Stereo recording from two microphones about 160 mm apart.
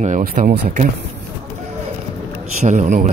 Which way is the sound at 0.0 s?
55° right (ahead or behind).